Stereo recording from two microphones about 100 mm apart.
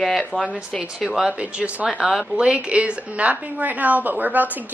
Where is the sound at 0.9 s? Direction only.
5° right (ahead or behind).